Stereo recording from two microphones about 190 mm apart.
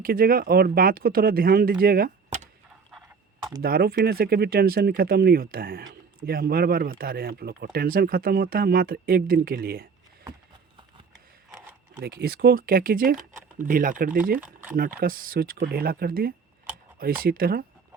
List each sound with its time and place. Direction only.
0.0 s speech: 50° right (ahead or behind)
1.8 s a sound: 50° right (ahead or behind)
3.6 s speech: 55° right (ahead or behind)
12.0 s speech: 55° right (ahead or behind)
14.4 s speech: 10° right (ahead or behind)
14.8 s speech: 50° right (ahead or behind)